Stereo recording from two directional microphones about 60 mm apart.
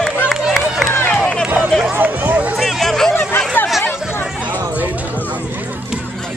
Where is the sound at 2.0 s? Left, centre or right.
Right.